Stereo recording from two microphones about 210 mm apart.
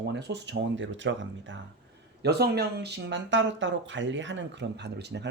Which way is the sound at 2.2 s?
50° right (ahead or behind).